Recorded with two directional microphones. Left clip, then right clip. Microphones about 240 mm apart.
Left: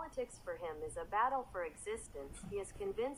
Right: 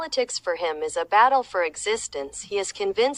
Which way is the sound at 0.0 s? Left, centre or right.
Right.